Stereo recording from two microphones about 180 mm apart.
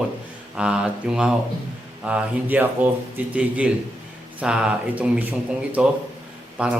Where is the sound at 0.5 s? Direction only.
5° right (ahead or behind).